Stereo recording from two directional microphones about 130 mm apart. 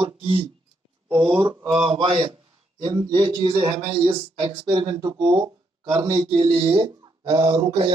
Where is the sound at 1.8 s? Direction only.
55° right (ahead or behind).